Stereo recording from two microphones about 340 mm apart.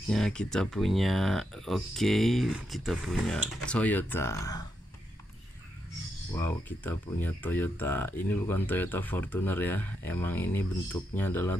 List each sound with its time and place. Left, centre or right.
0.1 s speech: centre
6.3 s speech: centre